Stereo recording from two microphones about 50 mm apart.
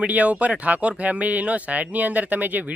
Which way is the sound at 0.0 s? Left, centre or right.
Right.